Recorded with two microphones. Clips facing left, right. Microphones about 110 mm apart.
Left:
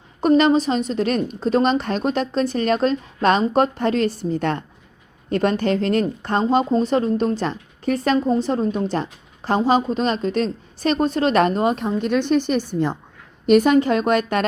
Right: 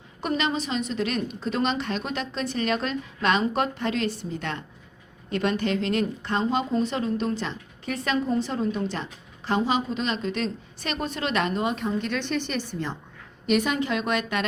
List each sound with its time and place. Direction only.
0.2 s a woman's voice: 40° left (ahead or behind)